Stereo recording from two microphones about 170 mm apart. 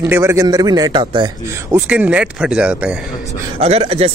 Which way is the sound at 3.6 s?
40° right (ahead or behind).